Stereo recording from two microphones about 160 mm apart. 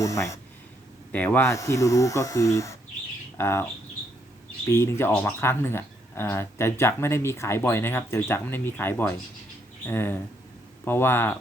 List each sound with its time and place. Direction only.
0.0 s speech: 20° left (ahead or behind)
4.7 s speech: 15° left (ahead or behind)